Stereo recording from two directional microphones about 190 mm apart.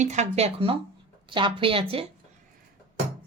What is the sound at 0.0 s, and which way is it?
A woman's voice, 40° right (ahead or behind).